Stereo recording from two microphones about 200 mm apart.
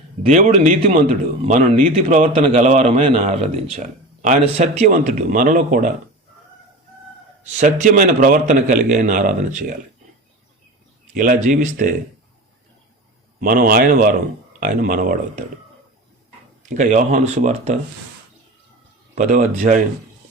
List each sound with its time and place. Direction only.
0.3 s speech: 35° right (ahead or behind)
7.6 s speech: 40° right (ahead or behind)
11.1 s speech: 40° right (ahead or behind)
13.4 s speech: 45° right (ahead or behind)
16.6 s speech: 40° right (ahead or behind)
19.1 s speech: 35° right (ahead or behind)